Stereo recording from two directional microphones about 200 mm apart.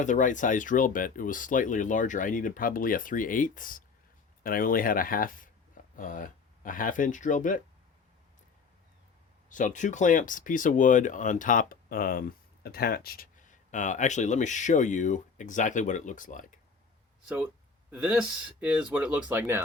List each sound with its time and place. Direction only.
0.0 s speech: 40° left (ahead or behind)
9.5 s speech: 40° left (ahead or behind)
17.2 s speech: 10° right (ahead or behind)